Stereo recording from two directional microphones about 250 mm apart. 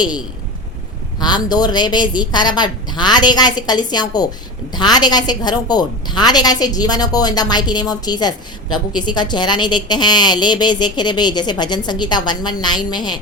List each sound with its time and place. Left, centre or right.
1.2 s a woman's voice: centre